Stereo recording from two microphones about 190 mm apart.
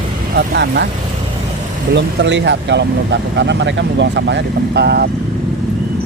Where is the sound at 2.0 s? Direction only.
65° right (ahead or behind).